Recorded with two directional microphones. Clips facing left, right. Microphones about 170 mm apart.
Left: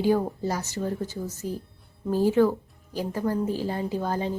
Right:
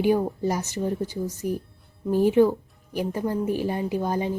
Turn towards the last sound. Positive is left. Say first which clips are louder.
# right 2 dB
turn(degrees=-15)  # may be behind; listen again after turning